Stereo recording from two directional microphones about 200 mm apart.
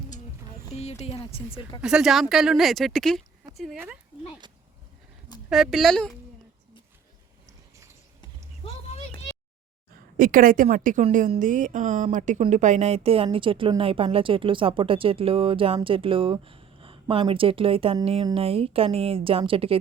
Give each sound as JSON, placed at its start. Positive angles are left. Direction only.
{"t": 0.7, "sound": "speech", "side_deg": 30}
{"t": 1.8, "sound": "speech", "side_deg": -5}
{"t": 5.5, "sound": "speech", "side_deg": 0}
{"t": 8.2, "sound": "a sound", "side_deg": 30}
{"t": 10.2, "sound": "a woman's voice", "side_deg": -45}